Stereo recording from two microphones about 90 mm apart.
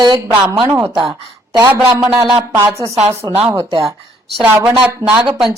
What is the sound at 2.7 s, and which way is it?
Speech, 35° right (ahead or behind).